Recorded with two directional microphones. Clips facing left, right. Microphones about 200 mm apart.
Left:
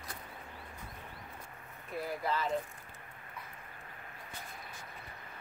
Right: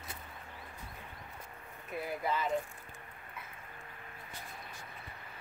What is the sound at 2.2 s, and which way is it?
Speech, 15° right (ahead or behind).